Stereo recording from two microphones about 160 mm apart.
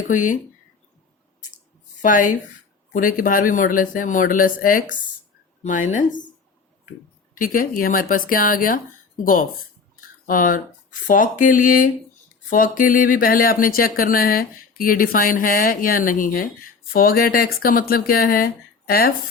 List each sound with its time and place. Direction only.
0.1 s a woman's voice: 55° left (ahead or behind)
2.0 s a woman's voice: 55° left (ahead or behind)
7.3 s speech: 60° left (ahead or behind)